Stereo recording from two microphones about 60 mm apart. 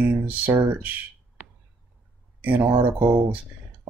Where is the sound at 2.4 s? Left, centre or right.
Right.